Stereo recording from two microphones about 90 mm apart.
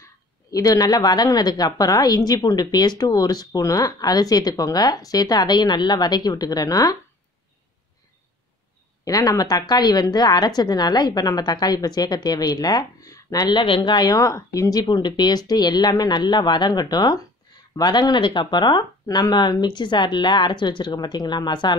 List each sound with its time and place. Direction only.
0.0 s speech: 40° left (ahead or behind)
9.0 s speech: 40° left (ahead or behind)
13.6 s speech: 65° left (ahead or behind)